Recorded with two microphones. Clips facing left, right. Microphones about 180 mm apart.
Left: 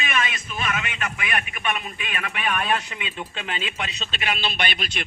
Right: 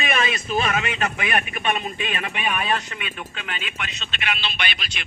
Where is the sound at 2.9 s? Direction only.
20° left (ahead or behind).